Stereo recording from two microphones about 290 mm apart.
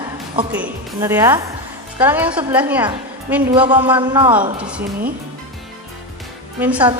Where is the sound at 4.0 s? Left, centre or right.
Centre.